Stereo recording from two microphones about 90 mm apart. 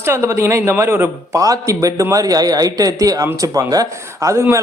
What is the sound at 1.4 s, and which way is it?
A man's voice, 40° right (ahead or behind).